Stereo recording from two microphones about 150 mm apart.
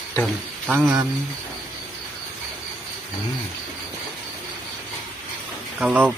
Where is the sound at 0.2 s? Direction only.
10° right (ahead or behind).